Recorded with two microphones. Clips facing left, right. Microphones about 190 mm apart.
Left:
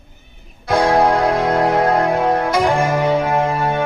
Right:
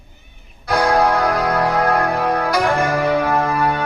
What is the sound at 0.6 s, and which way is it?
Music, 25° left (ahead or behind).